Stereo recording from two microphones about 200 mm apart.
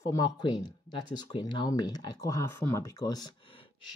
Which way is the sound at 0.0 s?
15° left (ahead or behind).